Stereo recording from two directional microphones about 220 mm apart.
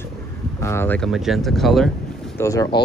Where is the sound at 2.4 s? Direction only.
15° left (ahead or behind).